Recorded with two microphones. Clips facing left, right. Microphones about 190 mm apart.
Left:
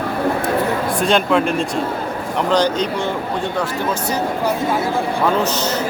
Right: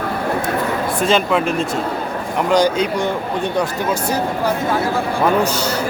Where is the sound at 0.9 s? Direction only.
Centre (ahead or behind); by 3.7 s 15° right (ahead or behind).